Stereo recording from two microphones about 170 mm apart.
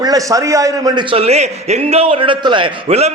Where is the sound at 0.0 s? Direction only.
20° right (ahead or behind).